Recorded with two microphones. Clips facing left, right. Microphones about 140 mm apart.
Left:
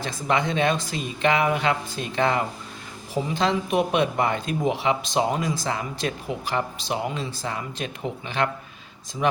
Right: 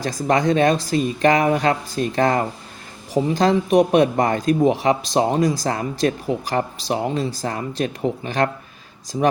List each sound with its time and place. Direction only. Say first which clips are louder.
0.0 s a man's voice: right 5 dB; 40° right (ahead or behind)